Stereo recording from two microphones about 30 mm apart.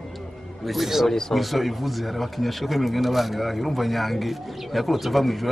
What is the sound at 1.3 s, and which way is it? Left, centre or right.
Speech, centre.